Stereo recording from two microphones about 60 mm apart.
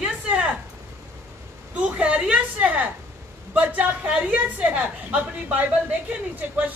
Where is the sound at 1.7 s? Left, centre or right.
Right.